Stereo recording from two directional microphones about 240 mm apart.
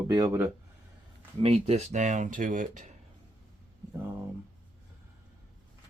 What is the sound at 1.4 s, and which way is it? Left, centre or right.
Speech, right.